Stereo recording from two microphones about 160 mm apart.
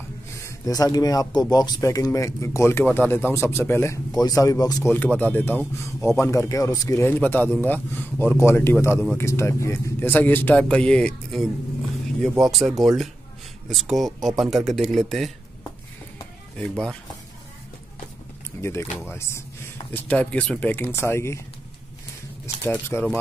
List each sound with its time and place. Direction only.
0.4 s speech: 20° left (ahead or behind)
4.9 s speech: 10° left (ahead or behind)
16.5 s speech: 5° left (ahead or behind)
18.6 s speech: 15° left (ahead or behind)
22.6 s speech: 15° left (ahead or behind)